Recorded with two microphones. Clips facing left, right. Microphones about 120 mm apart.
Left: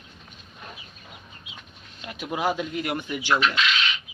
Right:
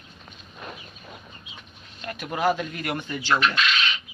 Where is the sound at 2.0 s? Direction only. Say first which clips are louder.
Right 1 dB; 15° left (ahead or behind).